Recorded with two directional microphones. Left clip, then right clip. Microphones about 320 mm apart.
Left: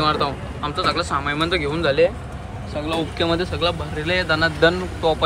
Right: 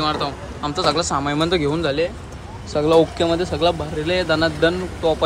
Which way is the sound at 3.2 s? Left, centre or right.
Centre.